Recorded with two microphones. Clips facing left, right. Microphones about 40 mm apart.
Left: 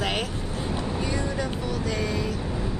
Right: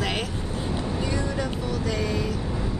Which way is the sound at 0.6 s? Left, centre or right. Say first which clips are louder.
Even; centre.